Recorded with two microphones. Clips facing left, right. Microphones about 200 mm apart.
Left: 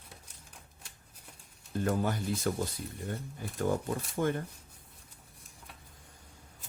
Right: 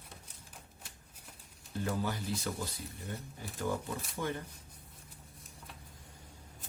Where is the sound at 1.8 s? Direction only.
50° left (ahead or behind).